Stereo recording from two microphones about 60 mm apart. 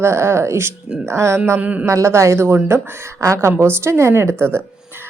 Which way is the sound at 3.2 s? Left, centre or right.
Right.